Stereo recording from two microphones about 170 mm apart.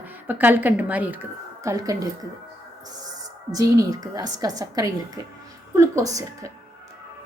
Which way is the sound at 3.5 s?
20° right (ahead or behind).